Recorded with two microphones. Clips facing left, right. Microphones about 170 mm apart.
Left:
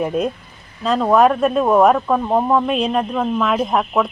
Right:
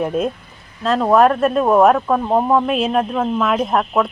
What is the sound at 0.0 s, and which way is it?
Speech, centre (ahead or behind).